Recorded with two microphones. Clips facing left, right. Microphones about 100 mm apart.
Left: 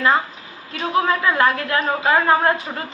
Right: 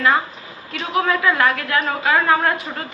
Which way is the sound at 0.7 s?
25° left (ahead or behind).